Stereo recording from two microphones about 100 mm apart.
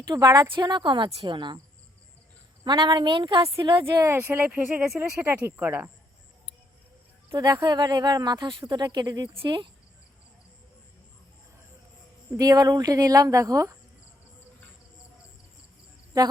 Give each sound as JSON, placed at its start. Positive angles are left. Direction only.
{"t": 0.1, "sound": "speech", "side_deg": -40}
{"t": 2.6, "sound": "speech", "side_deg": -45}
{"t": 4.0, "sound": "speech", "side_deg": -25}
{"t": 7.3, "sound": "speech", "side_deg": -40}
{"t": 12.4, "sound": "speech", "side_deg": -40}